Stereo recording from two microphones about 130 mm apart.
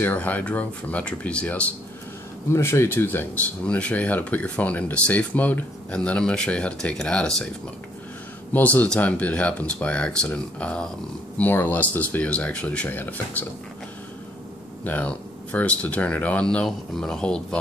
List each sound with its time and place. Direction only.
0.0 s speech: 15° left (ahead or behind)
2.5 s speech: 20° left (ahead or behind)
8.5 s speech: 10° left (ahead or behind)
14.9 s speech: 10° left (ahead or behind)